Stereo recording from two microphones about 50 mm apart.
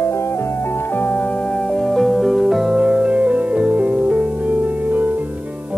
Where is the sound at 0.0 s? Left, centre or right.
Left.